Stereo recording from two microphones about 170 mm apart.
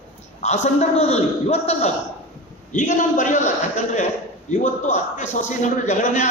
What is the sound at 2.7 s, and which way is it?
A man's voice, 50° left (ahead or behind).